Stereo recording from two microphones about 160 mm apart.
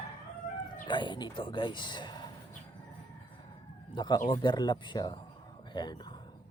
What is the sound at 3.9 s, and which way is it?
Speech, 25° left (ahead or behind).